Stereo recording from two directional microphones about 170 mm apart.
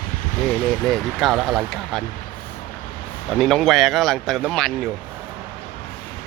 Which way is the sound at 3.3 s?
Centre (ahead or behind).